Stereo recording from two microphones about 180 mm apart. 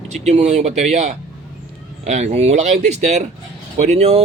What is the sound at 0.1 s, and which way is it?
Speech, 40° right (ahead or behind).